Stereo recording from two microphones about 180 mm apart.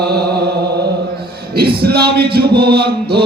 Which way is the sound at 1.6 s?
60° right (ahead or behind).